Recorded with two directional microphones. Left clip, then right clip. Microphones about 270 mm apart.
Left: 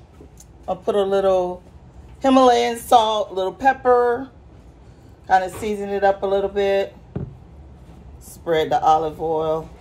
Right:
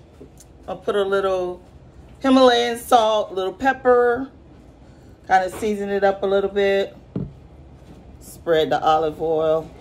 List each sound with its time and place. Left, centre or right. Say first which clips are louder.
0.7 s speech: left 1 dB; centre
5.2 s speech: even; centre
8.5 s speech: left 1 dB; centre